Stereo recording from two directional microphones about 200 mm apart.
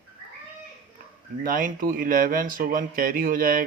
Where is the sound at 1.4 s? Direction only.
45° right (ahead or behind).